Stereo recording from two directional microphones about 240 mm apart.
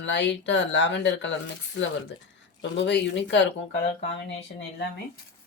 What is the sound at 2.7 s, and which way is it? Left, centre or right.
Speech, left.